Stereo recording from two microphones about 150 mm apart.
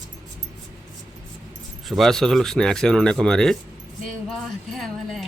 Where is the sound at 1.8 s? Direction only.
Centre (ahead or behind).